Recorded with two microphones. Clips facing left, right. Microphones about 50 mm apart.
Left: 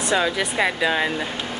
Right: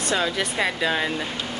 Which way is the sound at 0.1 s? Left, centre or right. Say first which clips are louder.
Left 3 dB; centre.